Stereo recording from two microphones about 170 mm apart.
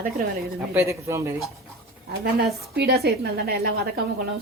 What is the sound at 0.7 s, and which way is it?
Speech, 15° right (ahead or behind).